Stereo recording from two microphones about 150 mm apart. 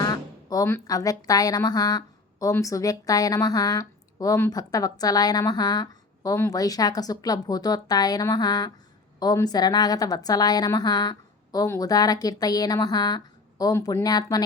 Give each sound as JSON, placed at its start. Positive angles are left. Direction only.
{"t": 0.0, "sound": "speech", "side_deg": 25}